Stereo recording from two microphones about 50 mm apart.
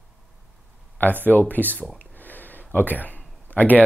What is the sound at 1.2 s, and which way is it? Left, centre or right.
Speech, left.